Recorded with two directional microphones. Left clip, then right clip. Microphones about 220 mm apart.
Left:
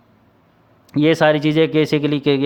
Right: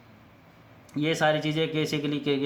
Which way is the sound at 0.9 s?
50° left (ahead or behind).